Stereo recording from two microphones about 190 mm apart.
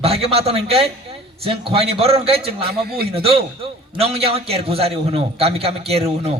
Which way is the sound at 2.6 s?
55° right (ahead or behind).